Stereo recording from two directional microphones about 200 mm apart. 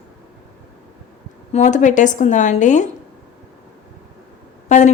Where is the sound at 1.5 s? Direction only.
35° left (ahead or behind).